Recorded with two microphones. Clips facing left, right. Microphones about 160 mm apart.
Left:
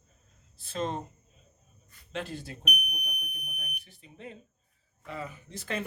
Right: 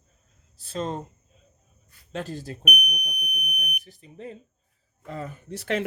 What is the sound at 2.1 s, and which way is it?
Speech, 35° right (ahead or behind).